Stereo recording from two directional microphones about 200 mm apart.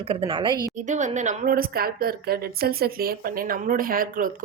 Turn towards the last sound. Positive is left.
turn(degrees=-45)  # may be behind; listen again after turning